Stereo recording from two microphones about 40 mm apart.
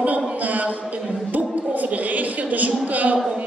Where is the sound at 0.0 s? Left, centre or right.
Right.